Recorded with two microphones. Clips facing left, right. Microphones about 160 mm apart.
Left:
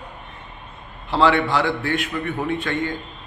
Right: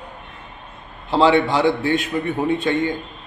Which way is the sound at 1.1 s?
20° right (ahead or behind).